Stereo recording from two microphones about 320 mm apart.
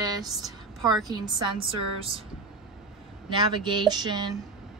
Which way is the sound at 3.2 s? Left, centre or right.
Centre.